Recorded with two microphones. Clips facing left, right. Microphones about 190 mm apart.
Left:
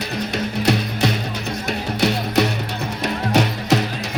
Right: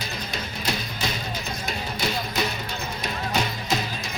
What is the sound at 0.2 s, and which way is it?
Music, 70° left (ahead or behind).